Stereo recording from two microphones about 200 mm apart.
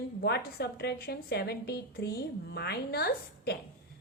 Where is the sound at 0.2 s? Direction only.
55° left (ahead or behind).